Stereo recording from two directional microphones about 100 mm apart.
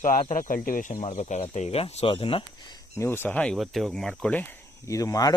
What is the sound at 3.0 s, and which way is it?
Speech, 20° left (ahead or behind).